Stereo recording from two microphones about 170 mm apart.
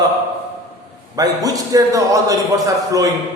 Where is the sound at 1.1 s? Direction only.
20° right (ahead or behind).